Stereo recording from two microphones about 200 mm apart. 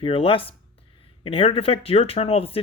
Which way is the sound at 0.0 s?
30° left (ahead or behind).